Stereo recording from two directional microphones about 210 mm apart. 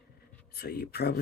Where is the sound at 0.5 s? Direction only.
45° left (ahead or behind).